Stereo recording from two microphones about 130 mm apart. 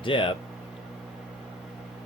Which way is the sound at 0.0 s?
40° left (ahead or behind).